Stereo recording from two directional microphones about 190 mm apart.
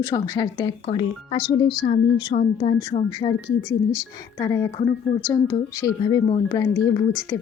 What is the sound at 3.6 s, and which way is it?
A woman's voice, 15° left (ahead or behind).